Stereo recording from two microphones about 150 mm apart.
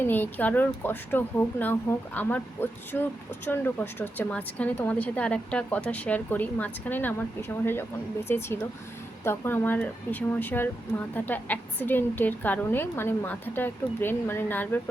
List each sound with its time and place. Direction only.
0.0 s speech: 10° left (ahead or behind)